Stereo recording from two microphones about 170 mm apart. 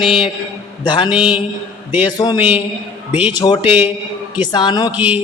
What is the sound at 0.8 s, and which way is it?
Speech, 25° left (ahead or behind).